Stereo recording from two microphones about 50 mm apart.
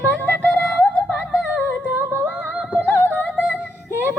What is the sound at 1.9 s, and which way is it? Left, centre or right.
Music, right.